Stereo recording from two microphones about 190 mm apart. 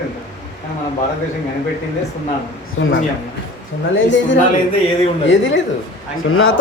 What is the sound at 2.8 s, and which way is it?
Speech, 90° left.